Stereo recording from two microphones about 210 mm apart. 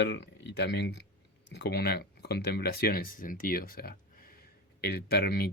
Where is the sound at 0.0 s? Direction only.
55° left (ahead or behind).